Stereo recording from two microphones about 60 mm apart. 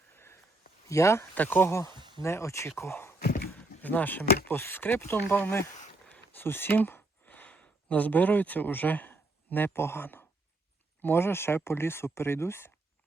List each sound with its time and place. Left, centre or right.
0.9 s speech: left
1.4 s speech: left
1.7 s speech: left
3.5 s speech: left